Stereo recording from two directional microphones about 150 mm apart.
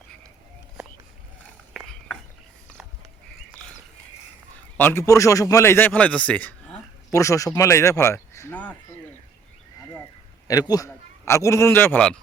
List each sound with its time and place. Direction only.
1.7 s a sound: centre (ahead or behind)
4.8 s speech: 15° left (ahead or behind)
7.1 s speech: 20° left (ahead or behind)
10.5 s speech: 25° left (ahead or behind)